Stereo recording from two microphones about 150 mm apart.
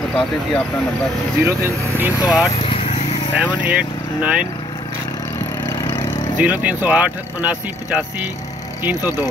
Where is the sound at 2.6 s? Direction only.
40° left (ahead or behind).